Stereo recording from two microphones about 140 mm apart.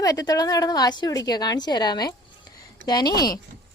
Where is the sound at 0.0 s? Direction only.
25° left (ahead or behind).